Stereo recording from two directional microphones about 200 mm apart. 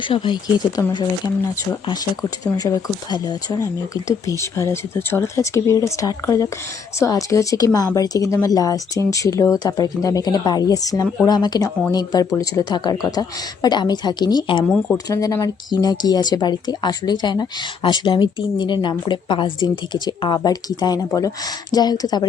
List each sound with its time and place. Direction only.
0.1 s speech: 25° left (ahead or behind)
2.4 s speech: 15° left (ahead or behind)